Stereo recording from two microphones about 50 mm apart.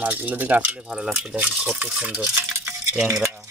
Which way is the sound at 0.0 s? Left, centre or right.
Right.